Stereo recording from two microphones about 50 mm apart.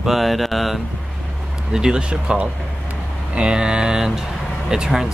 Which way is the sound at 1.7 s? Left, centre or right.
Centre.